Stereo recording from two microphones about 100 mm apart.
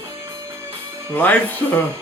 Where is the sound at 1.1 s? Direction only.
15° left (ahead or behind).